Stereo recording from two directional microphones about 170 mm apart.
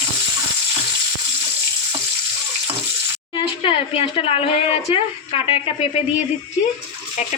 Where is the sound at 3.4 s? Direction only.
35° left (ahead or behind).